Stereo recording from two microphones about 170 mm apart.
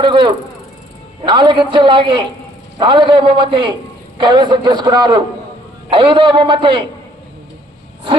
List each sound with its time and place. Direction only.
0.0 s a woman's voice: 25° right (ahead or behind)